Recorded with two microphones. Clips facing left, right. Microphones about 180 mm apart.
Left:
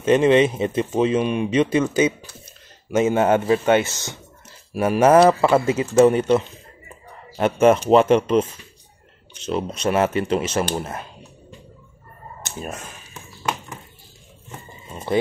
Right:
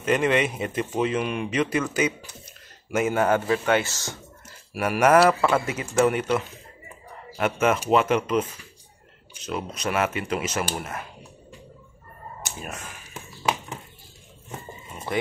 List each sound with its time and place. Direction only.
0.0 s speech: 25° left (ahead or behind)
15.1 s speech: 30° left (ahead or behind)